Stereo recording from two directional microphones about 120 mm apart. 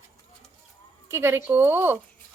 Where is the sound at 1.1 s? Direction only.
20° right (ahead or behind).